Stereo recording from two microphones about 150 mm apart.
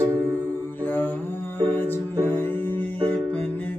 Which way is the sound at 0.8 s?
15° left (ahead or behind).